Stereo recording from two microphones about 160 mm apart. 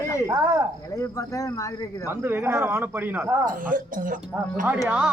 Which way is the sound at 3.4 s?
55° right (ahead or behind).